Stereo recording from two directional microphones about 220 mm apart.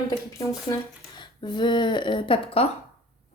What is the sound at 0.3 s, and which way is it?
A woman's voice, 15° left (ahead or behind).